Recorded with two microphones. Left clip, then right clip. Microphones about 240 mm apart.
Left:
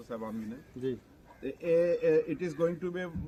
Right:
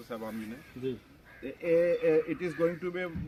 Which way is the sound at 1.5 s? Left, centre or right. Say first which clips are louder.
Right 1 dB; left.